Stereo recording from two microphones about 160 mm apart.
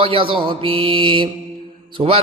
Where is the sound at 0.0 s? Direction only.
35° right (ahead or behind).